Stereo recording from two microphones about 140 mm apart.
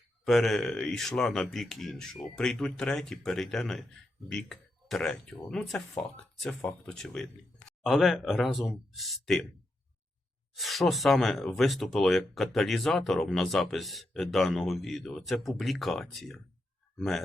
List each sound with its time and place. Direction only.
0.3 s speech: centre (ahead or behind)
10.5 s speech: centre (ahead or behind)